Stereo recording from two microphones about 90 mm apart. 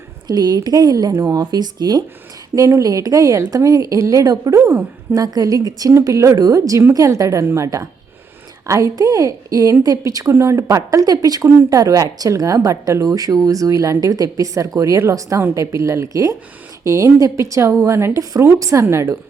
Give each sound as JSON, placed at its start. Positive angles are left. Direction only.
{"t": 0.3, "sound": "speech", "side_deg": -50}
{"t": 2.6, "sound": "speech", "side_deg": -40}